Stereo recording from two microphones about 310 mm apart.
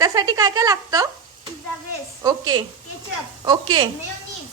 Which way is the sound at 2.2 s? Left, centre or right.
Centre.